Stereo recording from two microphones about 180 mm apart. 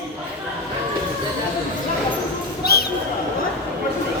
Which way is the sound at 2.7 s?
60° left (ahead or behind).